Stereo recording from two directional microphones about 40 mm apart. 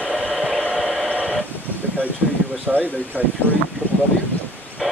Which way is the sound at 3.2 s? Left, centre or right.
Left.